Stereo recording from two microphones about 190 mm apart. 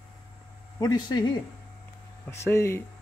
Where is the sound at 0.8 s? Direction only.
20° left (ahead or behind).